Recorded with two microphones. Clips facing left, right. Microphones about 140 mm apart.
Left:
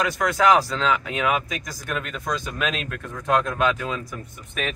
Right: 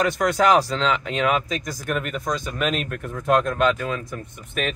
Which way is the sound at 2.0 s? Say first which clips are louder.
Right 2 dB; 5° right (ahead or behind).